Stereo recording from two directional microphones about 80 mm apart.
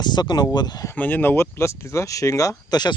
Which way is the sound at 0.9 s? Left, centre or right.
Left.